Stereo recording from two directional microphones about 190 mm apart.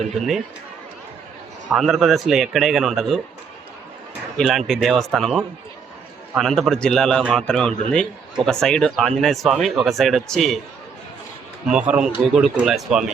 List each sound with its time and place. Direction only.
0.2 s speech: centre (ahead or behind)
1.7 s speech: centre (ahead or behind)
4.4 s speech: centre (ahead or behind)
11.7 s speech: 5° right (ahead or behind)